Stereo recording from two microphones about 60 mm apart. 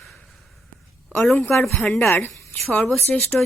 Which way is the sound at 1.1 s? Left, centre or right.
Centre.